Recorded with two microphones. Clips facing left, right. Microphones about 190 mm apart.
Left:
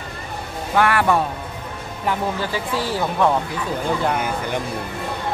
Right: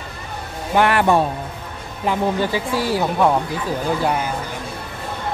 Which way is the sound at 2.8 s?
10° right (ahead or behind).